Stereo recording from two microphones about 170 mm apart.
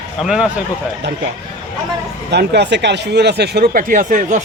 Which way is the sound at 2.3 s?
80° right.